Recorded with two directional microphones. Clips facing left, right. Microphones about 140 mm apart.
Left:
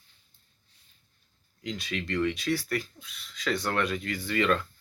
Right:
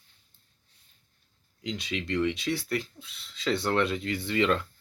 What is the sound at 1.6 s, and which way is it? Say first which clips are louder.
Speech: right 1 dB; 20° right (ahead or behind).